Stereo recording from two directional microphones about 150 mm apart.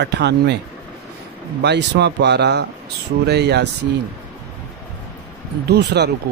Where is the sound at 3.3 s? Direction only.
90° right.